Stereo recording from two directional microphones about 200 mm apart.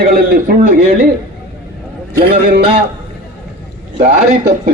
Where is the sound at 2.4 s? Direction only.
45° right (ahead or behind).